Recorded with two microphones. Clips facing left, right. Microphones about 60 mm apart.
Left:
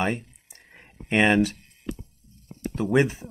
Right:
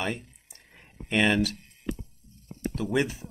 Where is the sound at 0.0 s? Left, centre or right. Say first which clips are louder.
Left 5 dB; left.